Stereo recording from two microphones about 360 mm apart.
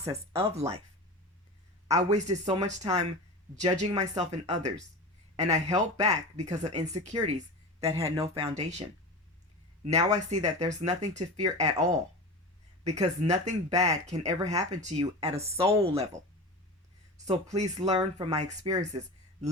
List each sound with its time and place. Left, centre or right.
0.0 s speech: centre
1.9 s speech: centre
9.8 s speech: centre
17.2 s speech: centre